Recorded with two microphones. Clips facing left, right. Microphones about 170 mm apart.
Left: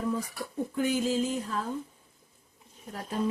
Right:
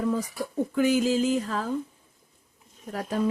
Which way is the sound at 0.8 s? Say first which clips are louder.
Right 5 dB; 85° right.